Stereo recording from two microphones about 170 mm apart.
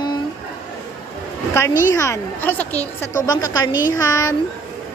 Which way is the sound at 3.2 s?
20° left (ahead or behind).